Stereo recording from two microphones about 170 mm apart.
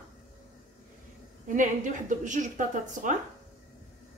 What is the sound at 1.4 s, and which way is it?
A woman's voice, 50° right (ahead or behind).